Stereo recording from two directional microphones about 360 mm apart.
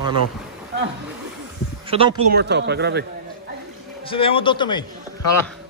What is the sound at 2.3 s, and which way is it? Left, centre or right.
Speech, right.